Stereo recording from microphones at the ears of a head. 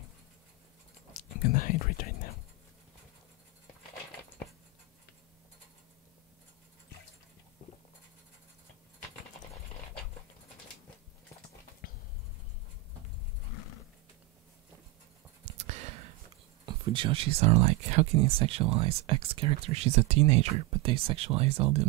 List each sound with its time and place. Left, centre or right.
1.1 s whispering: left
13.5 s horse: left
15.4 s speech: right